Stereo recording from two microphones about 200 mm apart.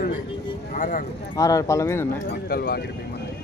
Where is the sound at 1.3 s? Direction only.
15° left (ahead or behind).